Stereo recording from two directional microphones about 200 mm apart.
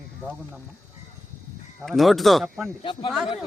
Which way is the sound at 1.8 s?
Centre (ahead or behind).